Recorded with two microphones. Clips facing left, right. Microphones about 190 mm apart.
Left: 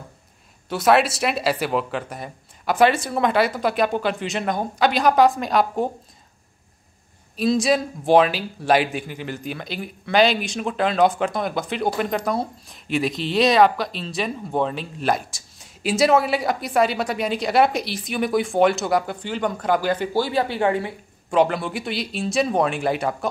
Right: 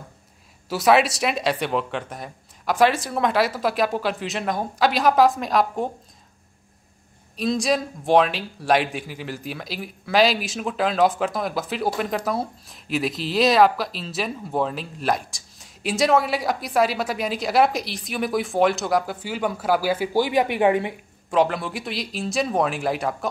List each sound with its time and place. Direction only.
0.7 s a man's voice: centre (ahead or behind)
7.3 s a man's voice: centre (ahead or behind); by 20.9 s 20° right (ahead or behind)
21.3 s a man's voice: centre (ahead or behind)